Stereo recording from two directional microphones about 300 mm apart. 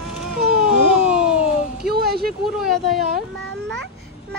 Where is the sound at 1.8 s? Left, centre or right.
Right.